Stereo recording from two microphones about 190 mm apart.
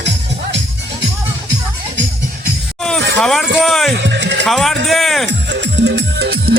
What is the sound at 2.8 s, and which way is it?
Speech, 5° left (ahead or behind).